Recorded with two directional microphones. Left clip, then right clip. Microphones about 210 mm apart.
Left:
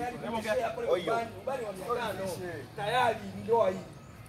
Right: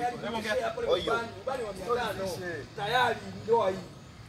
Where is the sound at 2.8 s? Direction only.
45° right (ahead or behind).